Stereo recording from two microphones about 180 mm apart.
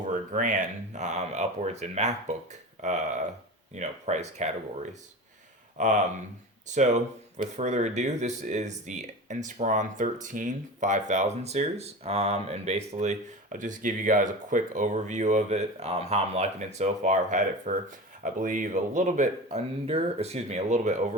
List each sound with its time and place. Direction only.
0.1 s speech: 45° right (ahead or behind)